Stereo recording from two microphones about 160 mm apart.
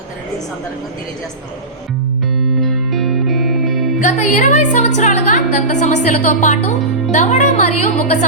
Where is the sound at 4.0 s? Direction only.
50° left (ahead or behind).